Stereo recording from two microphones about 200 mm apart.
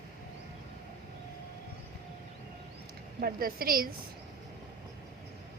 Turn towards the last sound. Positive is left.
turn(degrees=-50)  # may be behind; listen again after turning